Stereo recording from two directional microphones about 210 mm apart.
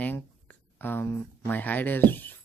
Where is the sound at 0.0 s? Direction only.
10° left (ahead or behind).